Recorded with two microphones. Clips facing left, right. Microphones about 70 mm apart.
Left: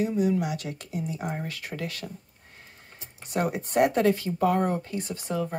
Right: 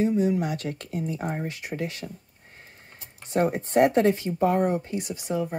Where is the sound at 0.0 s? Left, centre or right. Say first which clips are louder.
Right 3 dB; right.